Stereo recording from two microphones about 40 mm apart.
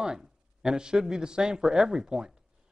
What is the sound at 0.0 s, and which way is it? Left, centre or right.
A man's voice, centre.